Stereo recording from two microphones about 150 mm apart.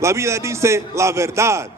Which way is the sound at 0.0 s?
20° right (ahead or behind).